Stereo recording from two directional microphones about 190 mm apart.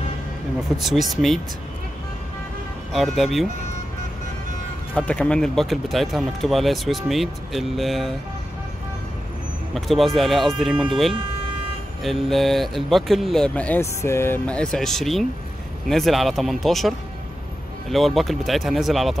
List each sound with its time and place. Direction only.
0.7 s speech: centre (ahead or behind)
2.9 s speech: centre (ahead or behind)
4.9 s speech: 5° left (ahead or behind)
9.8 s speech: centre (ahead or behind)